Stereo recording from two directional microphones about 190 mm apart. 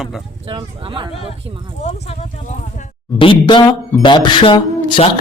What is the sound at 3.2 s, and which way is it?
Speech, 25° left (ahead or behind).